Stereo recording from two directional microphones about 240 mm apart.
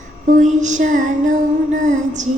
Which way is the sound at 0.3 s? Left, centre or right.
Right.